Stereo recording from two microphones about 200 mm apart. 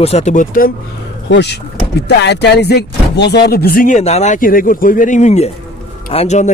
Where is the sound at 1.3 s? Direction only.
55° left (ahead or behind).